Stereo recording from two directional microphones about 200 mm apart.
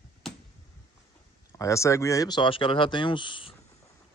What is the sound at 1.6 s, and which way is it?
Speech, 15° left (ahead or behind).